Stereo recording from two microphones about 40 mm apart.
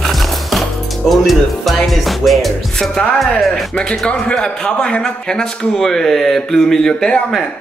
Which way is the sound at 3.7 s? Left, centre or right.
Centre.